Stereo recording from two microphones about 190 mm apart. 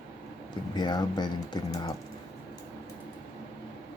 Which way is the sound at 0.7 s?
20° left (ahead or behind).